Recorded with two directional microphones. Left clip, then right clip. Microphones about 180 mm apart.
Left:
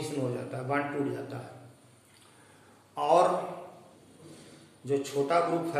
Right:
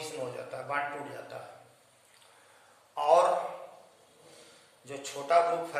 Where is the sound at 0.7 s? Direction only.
15° right (ahead or behind).